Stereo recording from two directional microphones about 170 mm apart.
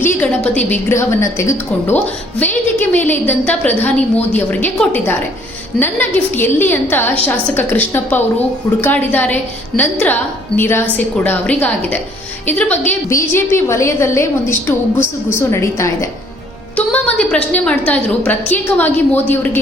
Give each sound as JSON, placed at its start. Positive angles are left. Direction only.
{"t": 0.0, "sound": "a woman's voice", "side_deg": 10}
{"t": 15.4, "sound": "a woman's voice", "side_deg": 15}